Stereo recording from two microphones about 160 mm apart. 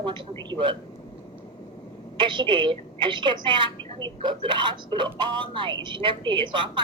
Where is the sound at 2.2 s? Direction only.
30° right (ahead or behind).